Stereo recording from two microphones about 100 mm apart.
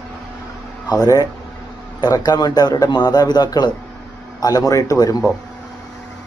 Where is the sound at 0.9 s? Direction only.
40° left (ahead or behind).